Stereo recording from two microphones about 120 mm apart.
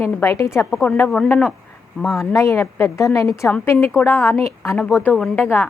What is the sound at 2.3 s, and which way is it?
A woman's voice, 25° left (ahead or behind).